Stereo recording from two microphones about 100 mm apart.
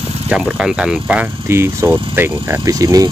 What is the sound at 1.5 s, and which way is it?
Speech, 25° right (ahead or behind).